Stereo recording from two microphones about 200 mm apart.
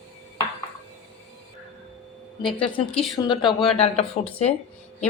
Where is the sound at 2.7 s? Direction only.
Centre (ahead or behind).